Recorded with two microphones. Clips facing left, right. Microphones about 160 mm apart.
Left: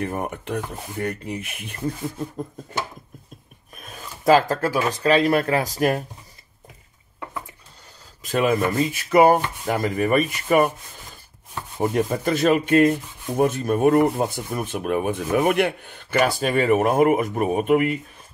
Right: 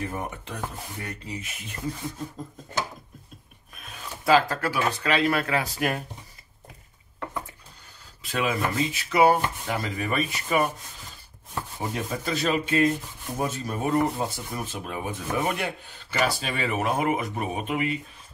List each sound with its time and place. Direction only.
0.0 s speech: 55° left (ahead or behind)
3.7 s speech: 40° left (ahead or behind)
8.2 s speech: 45° left (ahead or behind)
11.8 s speech: 55° left (ahead or behind)